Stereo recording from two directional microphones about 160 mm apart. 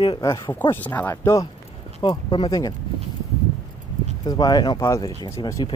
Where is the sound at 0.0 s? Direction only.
30° left (ahead or behind).